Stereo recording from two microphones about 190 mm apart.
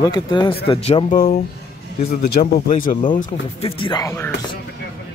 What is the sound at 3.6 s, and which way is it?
Speech, 25° left (ahead or behind).